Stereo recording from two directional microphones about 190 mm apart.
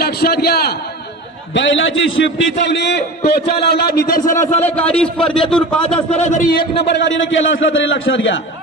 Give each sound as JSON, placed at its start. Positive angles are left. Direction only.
{"t": 0.0, "sound": "a man's voice", "side_deg": 55}
{"t": 1.5, "sound": "a man's voice", "side_deg": 75}
{"t": 4.3, "sound": "a man's voice", "side_deg": 15}
{"t": 5.8, "sound": "a man's voice", "side_deg": 30}